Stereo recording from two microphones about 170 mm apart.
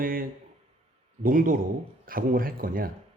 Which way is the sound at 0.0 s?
55° right (ahead or behind).